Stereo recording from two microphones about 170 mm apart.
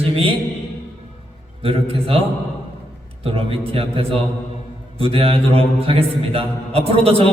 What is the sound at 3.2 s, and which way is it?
A man's voice, 35° right (ahead or behind).